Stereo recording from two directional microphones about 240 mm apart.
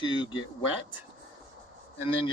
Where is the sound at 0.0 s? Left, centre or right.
Centre.